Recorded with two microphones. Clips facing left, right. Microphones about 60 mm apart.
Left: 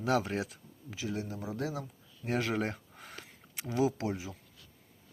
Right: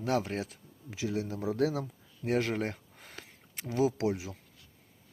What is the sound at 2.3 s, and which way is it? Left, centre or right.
Speech, centre.